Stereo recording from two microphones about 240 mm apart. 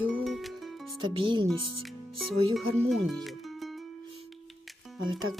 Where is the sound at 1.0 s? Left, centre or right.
Centre.